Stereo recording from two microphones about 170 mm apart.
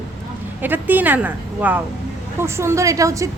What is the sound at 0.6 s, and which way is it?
Speech, 10° right (ahead or behind).